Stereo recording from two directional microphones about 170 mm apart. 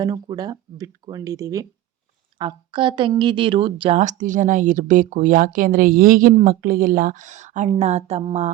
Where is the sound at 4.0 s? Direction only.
45° right (ahead or behind).